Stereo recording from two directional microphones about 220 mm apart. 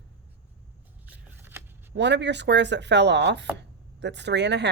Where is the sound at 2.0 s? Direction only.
50° right (ahead or behind).